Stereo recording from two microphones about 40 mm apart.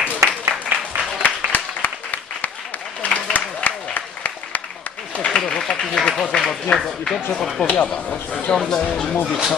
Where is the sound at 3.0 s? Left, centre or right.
Left.